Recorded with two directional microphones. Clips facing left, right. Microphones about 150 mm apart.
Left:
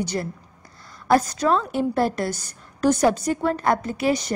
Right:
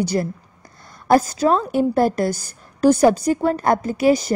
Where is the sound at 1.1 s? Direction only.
45° right (ahead or behind).